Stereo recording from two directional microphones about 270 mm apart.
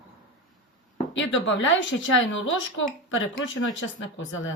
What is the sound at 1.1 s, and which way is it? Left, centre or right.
Speech, left.